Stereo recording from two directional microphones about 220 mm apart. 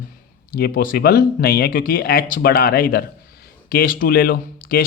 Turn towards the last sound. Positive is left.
turn(degrees=40)  # may be behind; listen again after turning